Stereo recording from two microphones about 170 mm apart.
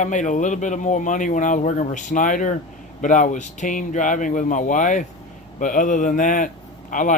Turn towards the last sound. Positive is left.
turn(degrees=50)  # may be behind; listen again after turning